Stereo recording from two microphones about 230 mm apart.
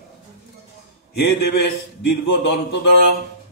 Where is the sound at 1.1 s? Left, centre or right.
Left.